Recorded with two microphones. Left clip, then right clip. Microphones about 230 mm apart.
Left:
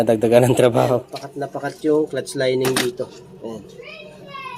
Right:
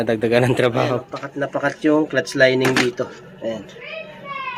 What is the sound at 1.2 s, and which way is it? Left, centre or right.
Speech, right.